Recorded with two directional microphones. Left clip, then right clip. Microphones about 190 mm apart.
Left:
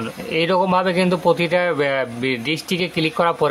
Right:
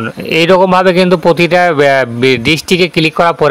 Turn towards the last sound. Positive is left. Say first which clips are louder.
# right 9 dB
turn(degrees=-35)  # may be behind; listen again after turning